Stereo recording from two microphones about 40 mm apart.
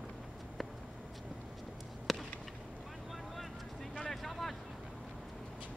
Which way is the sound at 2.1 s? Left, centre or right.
Centre.